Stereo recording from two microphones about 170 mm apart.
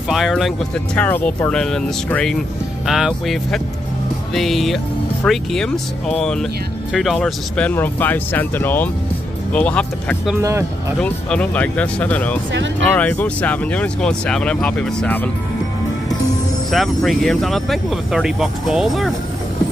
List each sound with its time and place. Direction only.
0.1 s speech: centre (ahead or behind)
10.4 s speech: 15° right (ahead or behind)
11.0 s speech: 5° left (ahead or behind)
16.7 s speech: centre (ahead or behind)